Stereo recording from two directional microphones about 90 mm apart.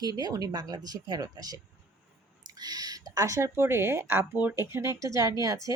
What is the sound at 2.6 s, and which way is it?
Speech, 45° right (ahead or behind).